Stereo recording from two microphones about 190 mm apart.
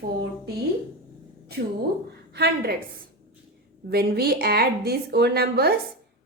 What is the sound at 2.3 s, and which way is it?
Speech, 60° right (ahead or behind).